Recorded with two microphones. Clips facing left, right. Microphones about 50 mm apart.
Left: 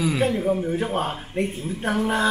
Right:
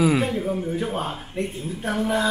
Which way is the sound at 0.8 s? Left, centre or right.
Left.